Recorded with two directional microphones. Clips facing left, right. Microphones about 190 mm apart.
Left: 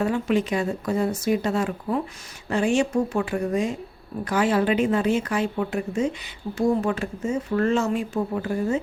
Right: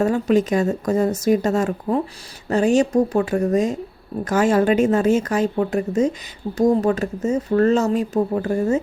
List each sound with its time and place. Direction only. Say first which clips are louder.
0.0 s speech: right 5 dB; 40° right (ahead or behind)